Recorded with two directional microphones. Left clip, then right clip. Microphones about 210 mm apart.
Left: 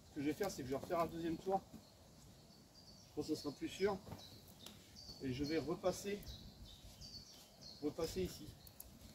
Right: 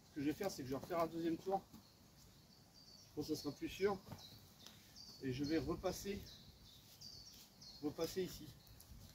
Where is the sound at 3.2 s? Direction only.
15° right (ahead or behind).